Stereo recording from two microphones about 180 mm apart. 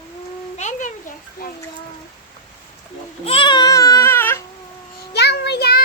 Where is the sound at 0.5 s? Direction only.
40° left (ahead or behind).